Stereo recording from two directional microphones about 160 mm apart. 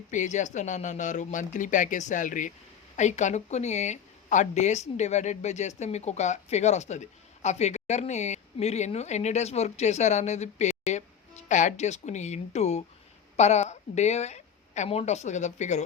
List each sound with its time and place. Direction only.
0.1 s a woman's voice: 50° left (ahead or behind)